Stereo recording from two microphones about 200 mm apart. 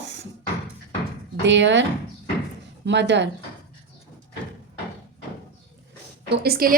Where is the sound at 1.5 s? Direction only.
65° right (ahead or behind).